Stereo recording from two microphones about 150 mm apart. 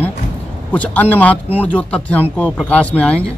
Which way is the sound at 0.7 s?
10° left (ahead or behind).